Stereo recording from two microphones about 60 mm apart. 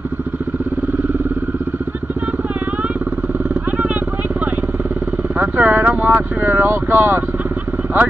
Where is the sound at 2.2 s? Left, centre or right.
Right.